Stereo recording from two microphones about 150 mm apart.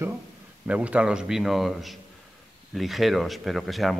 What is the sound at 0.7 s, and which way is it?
A man's voice, 10° right (ahead or behind).